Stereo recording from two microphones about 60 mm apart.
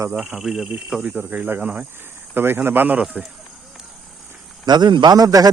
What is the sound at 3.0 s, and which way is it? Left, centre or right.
Speech, centre.